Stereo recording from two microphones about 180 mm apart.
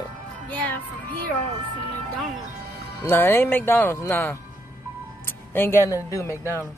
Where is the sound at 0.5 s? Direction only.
10° left (ahead or behind).